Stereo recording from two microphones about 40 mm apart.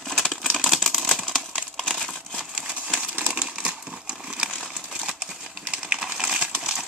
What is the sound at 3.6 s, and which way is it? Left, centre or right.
Crumpling, right.